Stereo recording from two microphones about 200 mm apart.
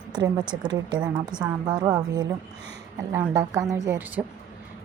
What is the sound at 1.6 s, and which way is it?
A woman's voice, 15° right (ahead or behind).